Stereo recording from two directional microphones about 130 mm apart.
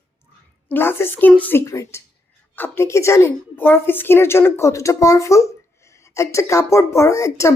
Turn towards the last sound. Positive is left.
turn(degrees=25)  # may be behind; listen again after turning